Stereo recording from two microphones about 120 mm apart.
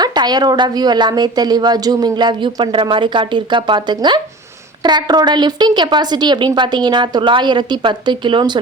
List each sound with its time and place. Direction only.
0.0 s speech: 35° right (ahead or behind)